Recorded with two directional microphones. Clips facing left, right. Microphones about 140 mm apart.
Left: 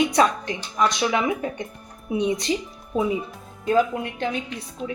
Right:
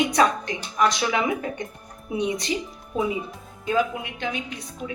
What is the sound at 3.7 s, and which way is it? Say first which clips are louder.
Speech: left 3 dB; 40° left (ahead or behind).